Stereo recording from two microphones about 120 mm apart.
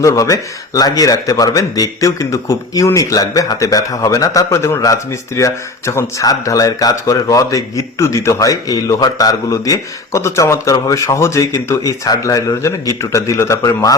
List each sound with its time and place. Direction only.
0.0 s speech: 30° left (ahead or behind)